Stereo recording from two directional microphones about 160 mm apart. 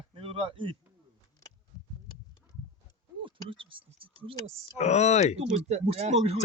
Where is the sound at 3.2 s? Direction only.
30° right (ahead or behind).